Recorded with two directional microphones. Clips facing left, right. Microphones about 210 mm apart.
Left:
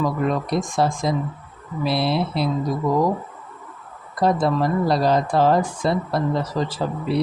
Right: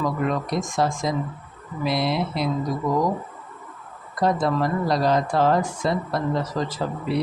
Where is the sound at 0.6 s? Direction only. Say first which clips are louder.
Left 2 dB; 35° left (ahead or behind).